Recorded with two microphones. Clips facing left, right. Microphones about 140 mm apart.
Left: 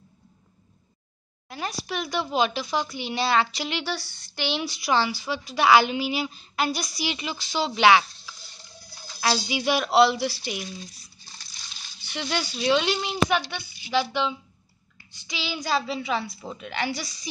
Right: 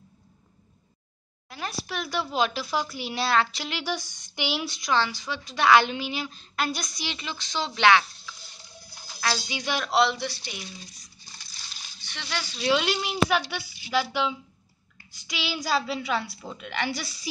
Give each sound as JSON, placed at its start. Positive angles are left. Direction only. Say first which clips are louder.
{"t": 1.5, "sound": "a woman's voice", "louder": "left 2 dB", "side_deg": 0}
{"t": 3.8, "sound": "speech", "louder": "even", "side_deg": -15}
{"t": 4.6, "sound": "a woman's voice", "louder": "left 3 dB", "side_deg": 5}
{"t": 9.5, "sound": "speech", "louder": "left 5 dB", "side_deg": 10}
{"t": 12.0, "sound": "a sound", "louder": "left 9 dB", "side_deg": 10}
{"t": 12.5, "sound": "a woman's voice", "louder": "left 1 dB", "side_deg": 0}